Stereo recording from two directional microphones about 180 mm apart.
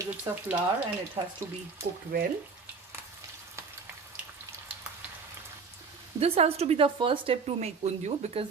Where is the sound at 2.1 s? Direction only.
55° right (ahead or behind).